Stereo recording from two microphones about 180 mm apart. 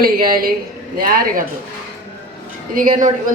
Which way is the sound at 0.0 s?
55° right (ahead or behind).